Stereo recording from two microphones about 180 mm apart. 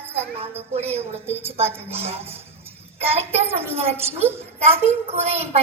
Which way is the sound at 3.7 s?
35° right (ahead or behind).